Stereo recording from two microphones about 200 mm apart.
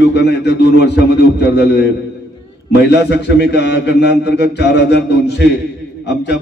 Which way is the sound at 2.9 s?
60° left (ahead or behind).